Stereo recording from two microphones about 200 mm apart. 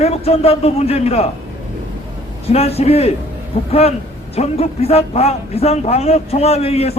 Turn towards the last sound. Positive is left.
turn(degrees=30)  # may be behind; listen again after turning